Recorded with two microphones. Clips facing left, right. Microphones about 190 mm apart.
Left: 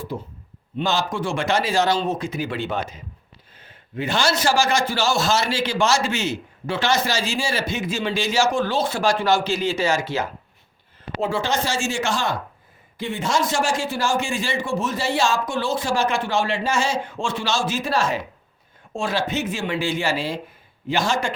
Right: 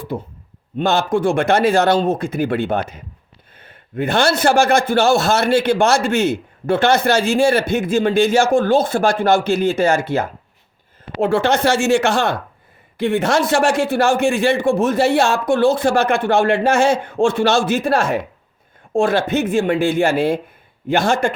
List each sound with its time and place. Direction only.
0.1 s a man's voice: 55° right (ahead or behind)